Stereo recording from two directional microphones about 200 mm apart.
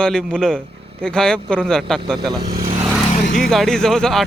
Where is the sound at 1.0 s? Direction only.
5° left (ahead or behind).